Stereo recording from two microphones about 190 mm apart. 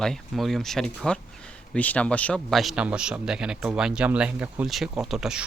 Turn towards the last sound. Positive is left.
turn(degrees=-5)  # may be behind; listen again after turning